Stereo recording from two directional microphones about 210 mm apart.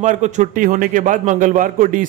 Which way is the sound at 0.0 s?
35° right (ahead or behind).